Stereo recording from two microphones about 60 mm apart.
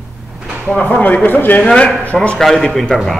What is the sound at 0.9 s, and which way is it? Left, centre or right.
Speech, left.